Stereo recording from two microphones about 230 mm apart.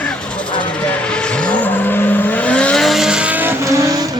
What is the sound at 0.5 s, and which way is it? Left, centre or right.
Vehicle, centre.